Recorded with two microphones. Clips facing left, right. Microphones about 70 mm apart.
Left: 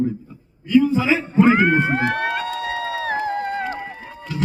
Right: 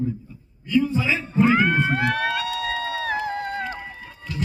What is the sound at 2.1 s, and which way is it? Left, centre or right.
Run, left.